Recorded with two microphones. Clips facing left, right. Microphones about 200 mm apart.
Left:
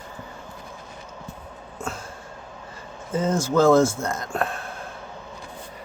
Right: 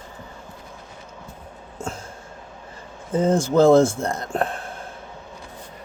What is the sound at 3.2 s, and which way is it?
Speech, 30° right (ahead or behind).